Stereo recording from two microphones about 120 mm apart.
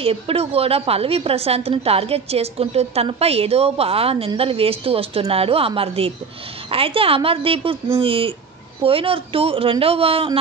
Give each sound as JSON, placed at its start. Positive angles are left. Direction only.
{"t": 0.0, "sound": "a woman's voice", "side_deg": -55}